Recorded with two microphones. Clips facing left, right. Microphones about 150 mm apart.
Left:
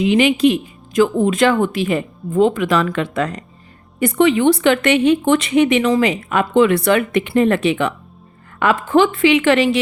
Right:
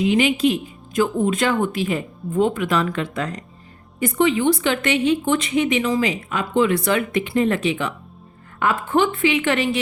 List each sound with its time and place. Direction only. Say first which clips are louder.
0.0 s a woman's voice: left 4 dB; 80° left; by 7.9 s 65° left (ahead or behind)
8.5 s a woman's voice: left 5 dB; 85° left